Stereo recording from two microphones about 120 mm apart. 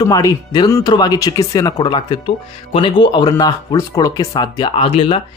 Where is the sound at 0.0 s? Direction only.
30° left (ahead or behind).